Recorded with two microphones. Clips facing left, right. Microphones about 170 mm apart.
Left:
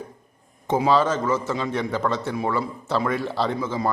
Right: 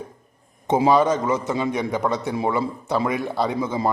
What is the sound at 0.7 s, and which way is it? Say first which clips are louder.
A man's voice: right 3 dB; 15° right (ahead or behind).